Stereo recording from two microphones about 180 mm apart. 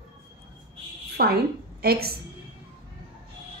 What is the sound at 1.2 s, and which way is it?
Speech, 55° right (ahead or behind).